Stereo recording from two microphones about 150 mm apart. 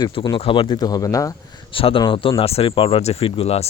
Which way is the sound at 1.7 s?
35° left (ahead or behind).